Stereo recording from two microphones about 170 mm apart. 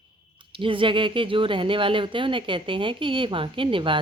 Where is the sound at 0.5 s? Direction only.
30° right (ahead or behind).